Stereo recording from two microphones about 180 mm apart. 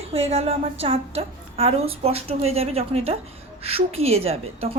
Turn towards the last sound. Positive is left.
turn(degrees=-35)  # may be behind; listen again after turning